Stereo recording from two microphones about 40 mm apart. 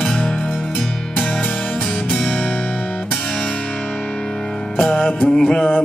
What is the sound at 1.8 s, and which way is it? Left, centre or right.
Music, left.